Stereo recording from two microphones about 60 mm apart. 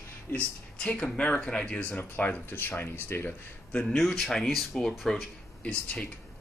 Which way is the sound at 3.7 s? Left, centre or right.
Centre.